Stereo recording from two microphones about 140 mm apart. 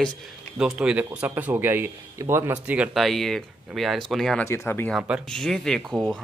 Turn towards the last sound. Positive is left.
turn(degrees=5)  # may be behind; listen again after turning